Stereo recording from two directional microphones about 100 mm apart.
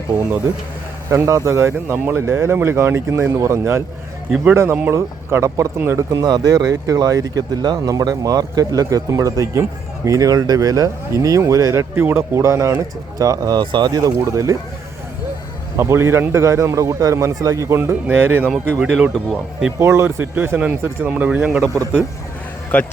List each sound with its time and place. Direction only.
1.1 s speech: 30° right (ahead or behind)
6.2 s speech: 45° right (ahead or behind)
15.8 s speech: 25° right (ahead or behind)
17.7 s speech: 20° right (ahead or behind)
18.5 s speech: 5° right (ahead or behind)
19.8 s speech: 25° right (ahead or behind)
22.7 s speech: 15° left (ahead or behind)